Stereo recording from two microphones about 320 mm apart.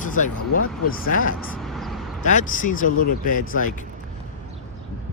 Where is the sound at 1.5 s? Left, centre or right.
Centre.